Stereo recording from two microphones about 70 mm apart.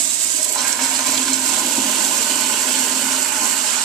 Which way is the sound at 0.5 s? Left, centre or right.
Centre.